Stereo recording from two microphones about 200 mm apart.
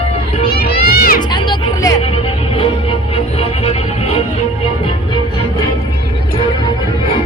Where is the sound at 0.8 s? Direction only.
50° left (ahead or behind).